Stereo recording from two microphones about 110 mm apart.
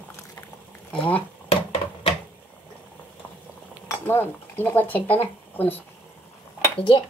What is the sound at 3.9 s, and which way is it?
Speech, 20° left (ahead or behind).